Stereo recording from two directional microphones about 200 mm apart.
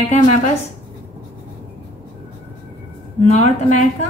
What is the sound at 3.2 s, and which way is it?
Speech, 35° left (ahead or behind).